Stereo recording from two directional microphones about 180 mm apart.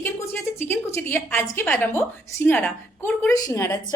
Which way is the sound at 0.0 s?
15° left (ahead or behind).